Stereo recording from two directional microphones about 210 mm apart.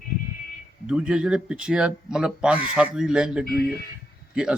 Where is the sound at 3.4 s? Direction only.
45° left (ahead or behind).